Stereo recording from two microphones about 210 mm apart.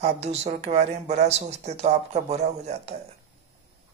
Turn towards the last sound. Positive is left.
turn(degrees=-30)  # may be behind; listen again after turning